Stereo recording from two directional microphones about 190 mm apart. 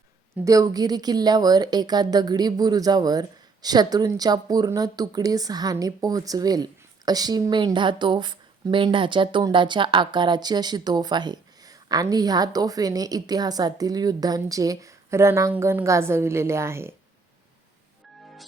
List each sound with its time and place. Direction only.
0.4 s a woman's voice: 20° right (ahead or behind)